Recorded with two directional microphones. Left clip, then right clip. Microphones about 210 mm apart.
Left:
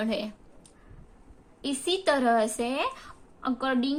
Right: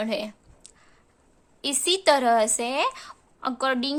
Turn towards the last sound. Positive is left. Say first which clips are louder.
# right 3 dB
turn(degrees=-40)  # may be behind; listen again after turning